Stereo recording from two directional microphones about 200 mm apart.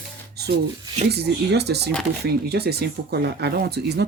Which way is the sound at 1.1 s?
55° right (ahead or behind).